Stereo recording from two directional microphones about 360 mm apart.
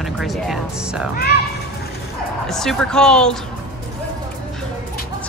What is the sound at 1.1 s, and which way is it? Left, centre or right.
Speech, left.